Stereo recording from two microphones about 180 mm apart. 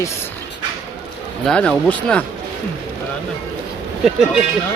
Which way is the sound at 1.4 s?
5° left (ahead or behind).